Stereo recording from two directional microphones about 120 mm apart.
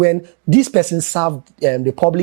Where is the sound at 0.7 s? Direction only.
20° right (ahead or behind).